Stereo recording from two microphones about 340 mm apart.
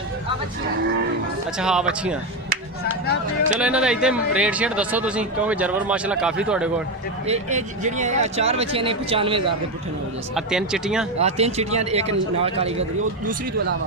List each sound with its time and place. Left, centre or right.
1.6 s speech: centre
3.6 s speech: centre
7.2 s speech: centre
10.3 s speech: centre
11.1 s a man's voice: centre